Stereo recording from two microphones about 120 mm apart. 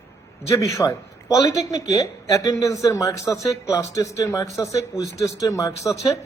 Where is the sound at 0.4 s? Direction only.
25° left (ahead or behind).